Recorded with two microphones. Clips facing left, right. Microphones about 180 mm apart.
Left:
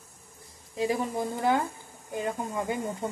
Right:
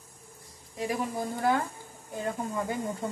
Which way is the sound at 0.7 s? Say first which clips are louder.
Left 3 dB; 25° left (ahead or behind).